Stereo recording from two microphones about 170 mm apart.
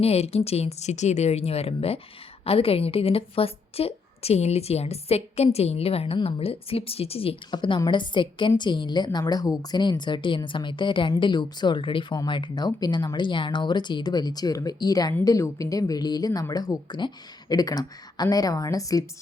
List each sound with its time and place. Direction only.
0.0 s a woman's voice: 35° left (ahead or behind); by 19.0 s 20° left (ahead or behind)